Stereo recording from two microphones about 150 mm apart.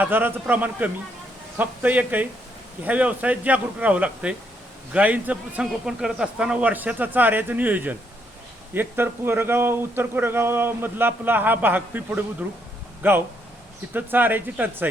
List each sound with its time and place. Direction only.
0.0 s speech: 15° right (ahead or behind)